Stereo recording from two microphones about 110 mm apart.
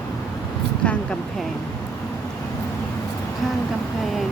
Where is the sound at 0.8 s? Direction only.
10° left (ahead or behind).